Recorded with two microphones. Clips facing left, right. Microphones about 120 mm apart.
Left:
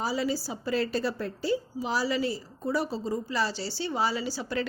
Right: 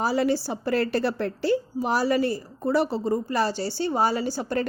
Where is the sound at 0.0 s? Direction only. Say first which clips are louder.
Right 6 dB; 60° right (ahead or behind).